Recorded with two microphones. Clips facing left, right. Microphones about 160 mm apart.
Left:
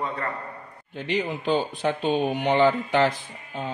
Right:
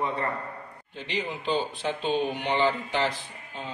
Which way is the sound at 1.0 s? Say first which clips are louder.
Left 5 dB; 50° left (ahead or behind).